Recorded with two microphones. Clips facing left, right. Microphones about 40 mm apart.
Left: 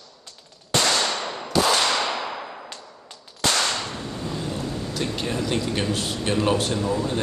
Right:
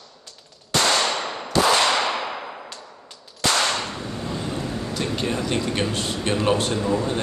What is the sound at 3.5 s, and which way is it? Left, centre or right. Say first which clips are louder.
Whip: right 2 dB; centre.